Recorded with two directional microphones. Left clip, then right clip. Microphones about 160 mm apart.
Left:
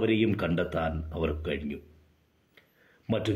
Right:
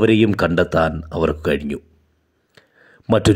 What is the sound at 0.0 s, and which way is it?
Speech, 40° right (ahead or behind).